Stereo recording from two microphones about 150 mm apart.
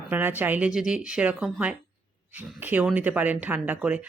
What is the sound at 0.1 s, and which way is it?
Speech, 10° right (ahead or behind).